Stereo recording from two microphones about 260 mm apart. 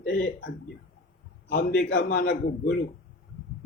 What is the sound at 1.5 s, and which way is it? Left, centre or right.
Speech, left.